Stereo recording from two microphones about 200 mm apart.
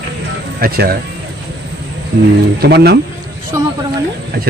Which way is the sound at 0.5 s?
50° right (ahead or behind).